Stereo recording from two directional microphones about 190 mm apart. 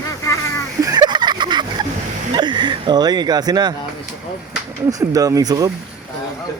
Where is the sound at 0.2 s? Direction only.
15° left (ahead or behind).